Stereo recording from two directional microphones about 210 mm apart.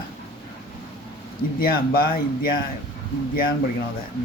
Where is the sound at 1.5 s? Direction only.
45° left (ahead or behind).